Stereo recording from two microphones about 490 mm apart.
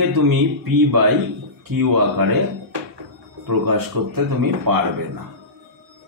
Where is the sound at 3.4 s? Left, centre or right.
Right.